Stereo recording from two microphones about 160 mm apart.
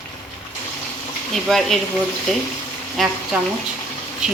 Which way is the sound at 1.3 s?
Centre (ahead or behind).